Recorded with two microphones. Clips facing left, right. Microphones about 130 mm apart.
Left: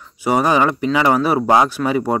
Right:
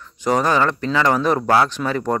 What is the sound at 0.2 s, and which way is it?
Speech, 10° left (ahead or behind).